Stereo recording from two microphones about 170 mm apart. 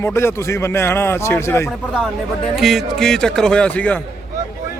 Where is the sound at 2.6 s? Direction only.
Centre (ahead or behind).